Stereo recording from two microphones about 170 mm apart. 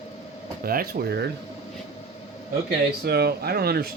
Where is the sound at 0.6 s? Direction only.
60° right (ahead or behind).